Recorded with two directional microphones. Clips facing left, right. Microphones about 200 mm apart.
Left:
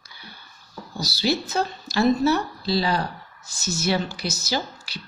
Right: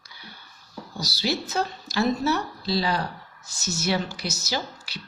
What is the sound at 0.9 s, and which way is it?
Speech, 30° left (ahead or behind).